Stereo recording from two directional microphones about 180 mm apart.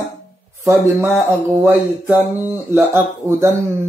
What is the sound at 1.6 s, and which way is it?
Speech, 10° right (ahead or behind).